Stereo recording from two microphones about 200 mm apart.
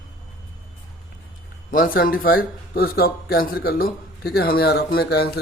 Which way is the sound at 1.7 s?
45° left (ahead or behind).